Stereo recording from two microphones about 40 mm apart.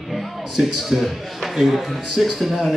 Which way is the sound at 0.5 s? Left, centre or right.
Centre.